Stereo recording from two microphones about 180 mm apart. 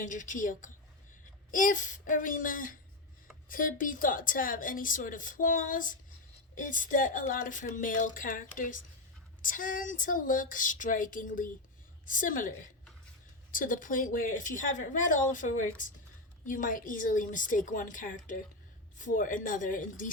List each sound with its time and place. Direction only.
0.0 s a woman's voice: 45° left (ahead or behind)